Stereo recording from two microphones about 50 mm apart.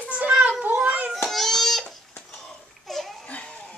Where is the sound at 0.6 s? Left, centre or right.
Right.